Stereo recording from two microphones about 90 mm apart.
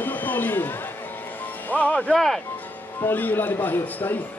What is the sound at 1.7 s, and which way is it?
Music, 15° left (ahead or behind).